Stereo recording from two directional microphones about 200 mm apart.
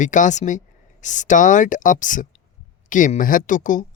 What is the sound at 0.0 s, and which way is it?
Speech, 40° left (ahead or behind).